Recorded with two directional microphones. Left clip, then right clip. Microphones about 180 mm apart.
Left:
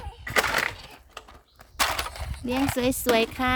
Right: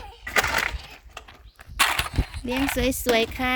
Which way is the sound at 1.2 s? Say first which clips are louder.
Right 1 dB; 45° right (ahead or behind).